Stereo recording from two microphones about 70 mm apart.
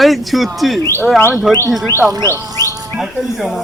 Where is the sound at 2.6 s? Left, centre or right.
Right.